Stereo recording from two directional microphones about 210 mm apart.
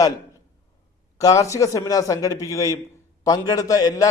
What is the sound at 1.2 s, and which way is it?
A man's voice, 15° left (ahead or behind).